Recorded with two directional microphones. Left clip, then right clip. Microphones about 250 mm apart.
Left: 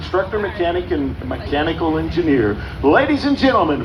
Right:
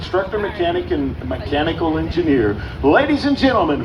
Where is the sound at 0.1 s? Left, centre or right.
Right.